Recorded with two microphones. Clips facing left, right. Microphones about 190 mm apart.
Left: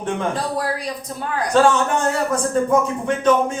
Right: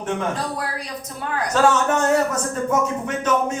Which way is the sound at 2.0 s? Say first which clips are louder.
Right 1 dB; 30° left (ahead or behind).